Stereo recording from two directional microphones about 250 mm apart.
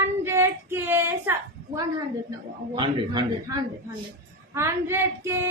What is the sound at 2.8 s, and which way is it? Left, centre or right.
Child singing, centre.